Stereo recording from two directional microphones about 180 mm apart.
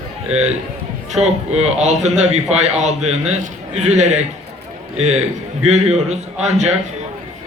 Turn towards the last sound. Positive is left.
turn(degrees=-40)  # may be behind; listen again after turning